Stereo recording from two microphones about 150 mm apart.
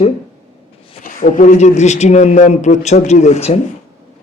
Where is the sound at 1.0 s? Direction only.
65° left (ahead or behind); by 3.6 s 45° left (ahead or behind).